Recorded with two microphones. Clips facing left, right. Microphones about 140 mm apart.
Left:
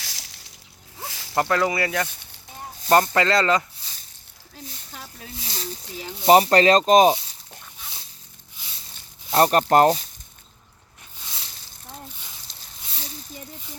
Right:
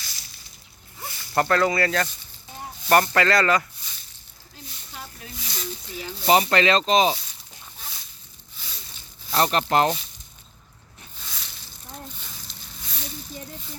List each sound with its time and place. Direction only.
0.0 s a sound: 90° left
1.4 s speech: 15° left (ahead or behind)
5.4 s snake: 30° left (ahead or behind)
6.2 s speech: 35° left (ahead or behind)
9.3 s speech: 40° left (ahead or behind)
12.5 s a sound: 35° left (ahead or behind)